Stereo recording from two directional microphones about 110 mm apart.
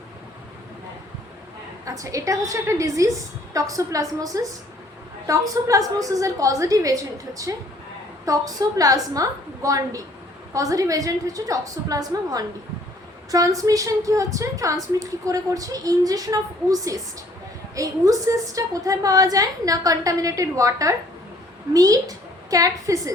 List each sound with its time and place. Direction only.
1.8 s a woman's voice: 30° right (ahead or behind)